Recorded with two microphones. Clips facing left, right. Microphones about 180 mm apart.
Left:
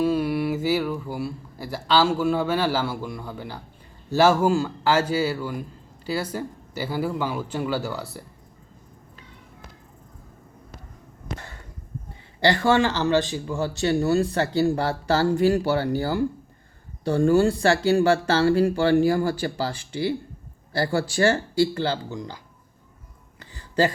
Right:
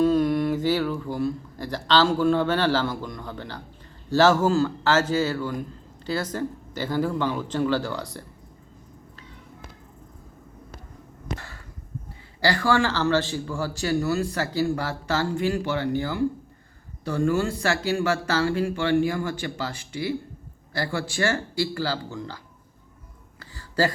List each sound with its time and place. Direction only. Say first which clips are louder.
0.0 s speech: right 2 dB; 10° left (ahead or behind)
12.4 s speech: left 3 dB; 25° left (ahead or behind)
23.4 s a sound: left 2 dB; 20° left (ahead or behind)